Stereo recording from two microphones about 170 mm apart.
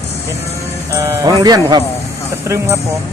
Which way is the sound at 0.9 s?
20° right (ahead or behind).